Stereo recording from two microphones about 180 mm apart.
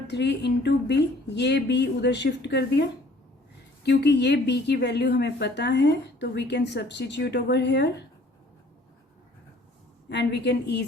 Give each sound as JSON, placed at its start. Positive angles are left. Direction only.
{"t": 0.1, "sound": "speech", "side_deg": 70}
{"t": 10.1, "sound": "speech", "side_deg": 70}